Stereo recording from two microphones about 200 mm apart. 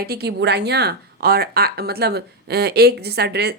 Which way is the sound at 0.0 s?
50° right (ahead or behind).